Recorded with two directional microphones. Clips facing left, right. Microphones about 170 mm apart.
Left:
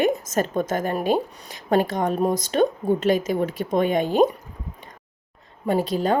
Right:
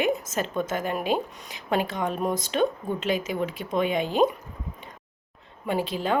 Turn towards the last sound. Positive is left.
turn(degrees=40)  # may be behind; listen again after turning